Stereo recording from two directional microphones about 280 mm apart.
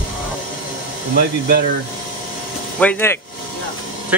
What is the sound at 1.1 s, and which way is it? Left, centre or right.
Speech, right.